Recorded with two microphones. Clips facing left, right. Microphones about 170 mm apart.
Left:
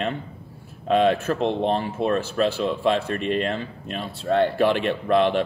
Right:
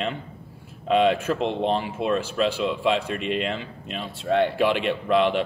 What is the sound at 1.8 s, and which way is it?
Speech, 10° right (ahead or behind).